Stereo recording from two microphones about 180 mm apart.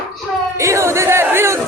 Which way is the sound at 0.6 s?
15° right (ahead or behind).